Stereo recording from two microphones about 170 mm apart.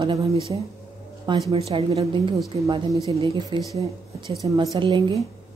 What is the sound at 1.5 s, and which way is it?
A woman's voice, 35° right (ahead or behind).